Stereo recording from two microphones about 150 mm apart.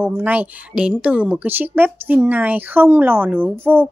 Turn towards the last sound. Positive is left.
turn(degrees=-15)  # may be behind; listen again after turning